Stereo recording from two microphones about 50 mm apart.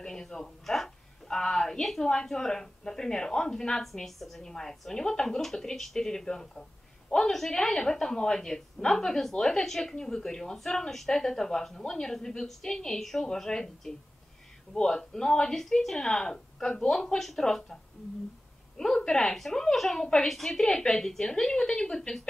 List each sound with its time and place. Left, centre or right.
0.0 s a woman's voice: centre
3.8 s a woman's voice: centre
18.9 s a woman's voice: centre
20.6 s a woman's voice: centre